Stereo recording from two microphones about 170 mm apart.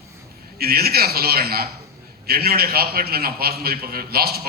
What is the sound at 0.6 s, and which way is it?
A man's voice, 65° right (ahead or behind).